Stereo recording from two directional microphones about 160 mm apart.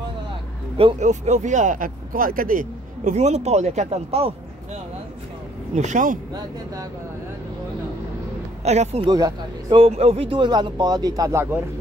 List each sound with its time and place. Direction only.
0.9 s speech: 45° right (ahead or behind)
5.8 s speech: 50° right (ahead or behind)
6.3 s speech: 20° right (ahead or behind)
8.6 s speech: 45° right (ahead or behind)
9.0 s speech: 25° right (ahead or behind)
9.8 s speech: 40° right (ahead or behind); by 11.6 s 20° right (ahead or behind)